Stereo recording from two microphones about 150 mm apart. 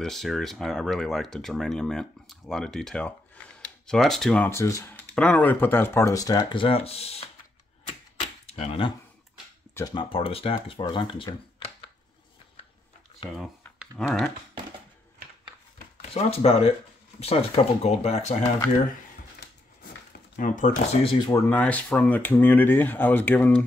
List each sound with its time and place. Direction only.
0.0 s speech: centre (ahead or behind)
4.5 s speech: 20° left (ahead or behind); by 7.2 s 40° left (ahead or behind)
8.2 s a sound: 45° left (ahead or behind)
9.8 s speech: 25° left (ahead or behind)
10.0 s speech: 40° left (ahead or behind)
13.3 s speech: centre (ahead or behind)
16.0 s speech: 45° left (ahead or behind)
20.1 s a sound: 60° left (ahead or behind)
21.0 s speech: 35° left (ahead or behind)
21.3 s speech: 10° left (ahead or behind)